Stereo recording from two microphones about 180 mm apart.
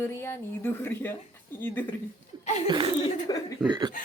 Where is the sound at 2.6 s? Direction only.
25° right (ahead or behind).